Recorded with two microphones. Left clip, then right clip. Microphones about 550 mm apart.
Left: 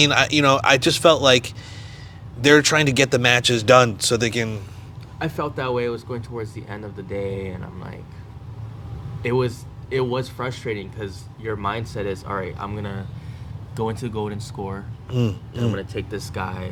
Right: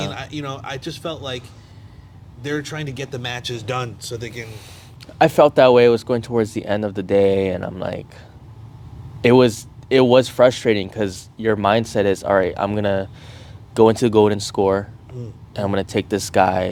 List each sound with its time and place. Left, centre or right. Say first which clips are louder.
0.0 s speech: left 12 dB; left
5.1 s speech: right 14 dB; right
9.2 s speech: right 9 dB; right